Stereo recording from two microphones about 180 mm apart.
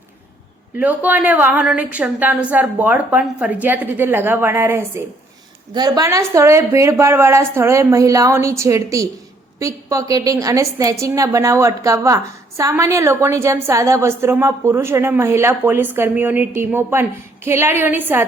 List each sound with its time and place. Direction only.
0.8 s a woman's voice: 10° right (ahead or behind)